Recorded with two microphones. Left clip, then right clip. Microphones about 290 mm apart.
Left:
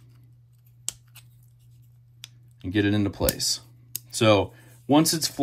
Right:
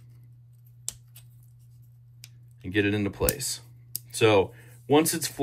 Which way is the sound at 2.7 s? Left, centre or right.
Centre.